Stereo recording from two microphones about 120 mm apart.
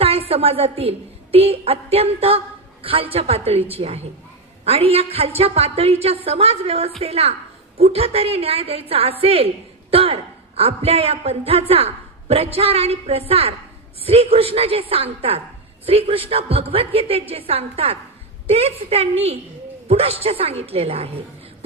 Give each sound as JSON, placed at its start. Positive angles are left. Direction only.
{"t": 0.0, "sound": "a woman's voice", "side_deg": -50}